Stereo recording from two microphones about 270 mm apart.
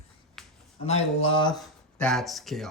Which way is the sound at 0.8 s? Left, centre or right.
Left.